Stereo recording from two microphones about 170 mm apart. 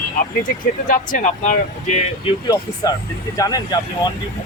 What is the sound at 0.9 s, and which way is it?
Speech, 50° left (ahead or behind).